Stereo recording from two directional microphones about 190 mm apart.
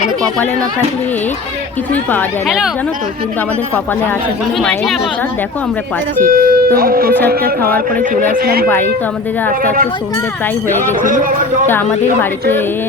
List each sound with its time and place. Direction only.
2.1 s speech: centre (ahead or behind)
6.2 s speech: 45° right (ahead or behind)
11.0 s speech: 45° right (ahead or behind)